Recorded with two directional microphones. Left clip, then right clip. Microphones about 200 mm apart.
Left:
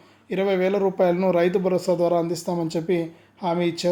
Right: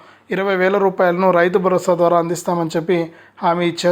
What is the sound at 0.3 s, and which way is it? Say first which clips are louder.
Speech: right 5 dB; 5° right (ahead or behind).